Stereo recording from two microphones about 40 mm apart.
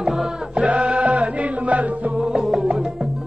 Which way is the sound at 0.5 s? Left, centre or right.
Right.